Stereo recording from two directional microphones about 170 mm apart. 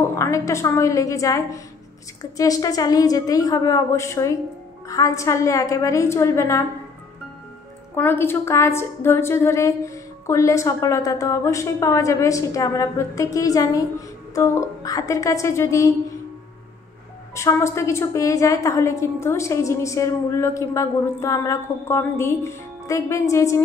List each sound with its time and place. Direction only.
0.1 s a woman's voice: 15° left (ahead or behind)
7.9 s a woman's voice: 15° left (ahead or behind)
17.3 s a woman's voice: 15° left (ahead or behind)